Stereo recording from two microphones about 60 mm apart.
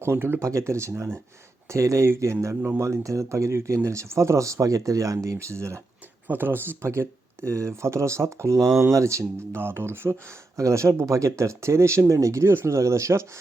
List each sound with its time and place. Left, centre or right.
0.0 s speech: right
0.4 s speech: right
6.2 s speech: right
9.6 s speech: right
10.6 s speech: right